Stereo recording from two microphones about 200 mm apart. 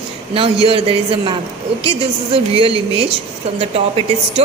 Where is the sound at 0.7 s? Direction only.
25° right (ahead or behind).